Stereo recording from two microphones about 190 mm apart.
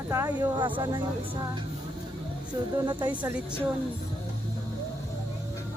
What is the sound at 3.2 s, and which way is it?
Speech, 10° right (ahead or behind).